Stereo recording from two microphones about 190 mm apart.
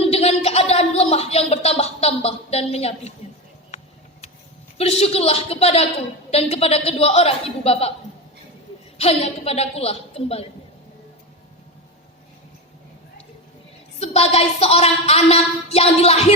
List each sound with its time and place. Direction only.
0.0 s a sound: 35° left (ahead or behind)
4.8 s a woman's voice: 30° left (ahead or behind)
9.0 s a woman's voice: 30° left (ahead or behind)
14.0 s a woman's voice: 35° left (ahead or behind)